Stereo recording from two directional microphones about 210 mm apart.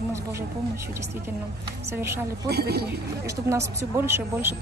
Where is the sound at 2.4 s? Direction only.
50° right (ahead or behind).